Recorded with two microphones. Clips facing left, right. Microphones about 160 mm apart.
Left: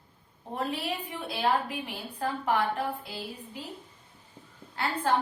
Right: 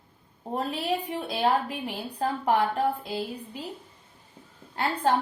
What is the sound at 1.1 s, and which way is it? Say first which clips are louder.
A woman's voice: right 1 dB; 40° right (ahead or behind).